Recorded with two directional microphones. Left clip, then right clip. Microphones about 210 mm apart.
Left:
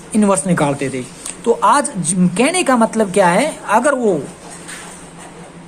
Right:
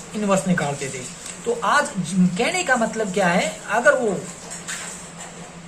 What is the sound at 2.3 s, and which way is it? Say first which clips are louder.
A woman's voice: left 6 dB; 55° left (ahead or behind).